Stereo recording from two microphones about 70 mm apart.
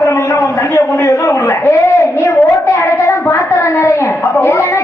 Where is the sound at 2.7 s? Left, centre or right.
Left.